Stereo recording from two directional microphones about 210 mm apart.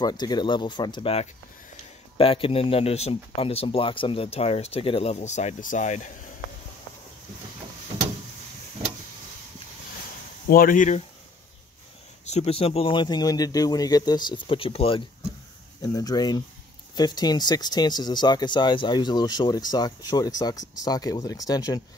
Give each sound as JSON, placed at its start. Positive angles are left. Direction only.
{"t": 0.0, "sound": "speech", "side_deg": 20}
{"t": 10.5, "sound": "speech", "side_deg": 40}
{"t": 12.3, "sound": "speech", "side_deg": 30}